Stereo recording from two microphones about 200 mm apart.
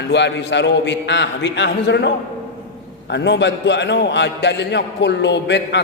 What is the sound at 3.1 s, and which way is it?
A man's voice, 60° left (ahead or behind).